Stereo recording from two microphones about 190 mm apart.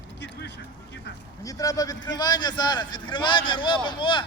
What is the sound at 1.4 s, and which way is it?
A man's voice, 20° left (ahead or behind).